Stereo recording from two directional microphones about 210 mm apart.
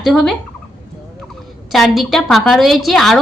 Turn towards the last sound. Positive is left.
turn(degrees=0)  # may be behind; listen again after turning